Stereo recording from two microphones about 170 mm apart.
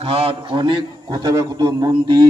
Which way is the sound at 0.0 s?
35° right (ahead or behind).